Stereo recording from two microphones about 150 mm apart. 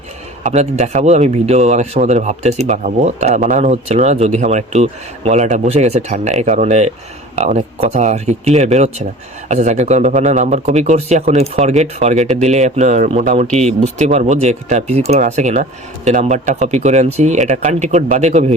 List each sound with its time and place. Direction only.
0.4 s speech: 50° right (ahead or behind)